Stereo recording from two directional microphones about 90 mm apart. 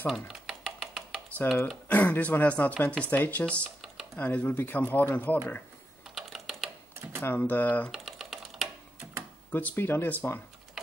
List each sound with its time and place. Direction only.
0.0 s a sound: centre (ahead or behind)
1.4 s speech: 25° left (ahead or behind)
3.8 s computer keyboard: 5° right (ahead or behind)
4.2 s speech: 20° left (ahead or behind)
6.1 s typing: centre (ahead or behind)
7.0 s typewriter: 25° right (ahead or behind)
7.2 s speech: 20° left (ahead or behind)
7.9 s typing: centre (ahead or behind)
9.5 s speech: 20° left (ahead or behind)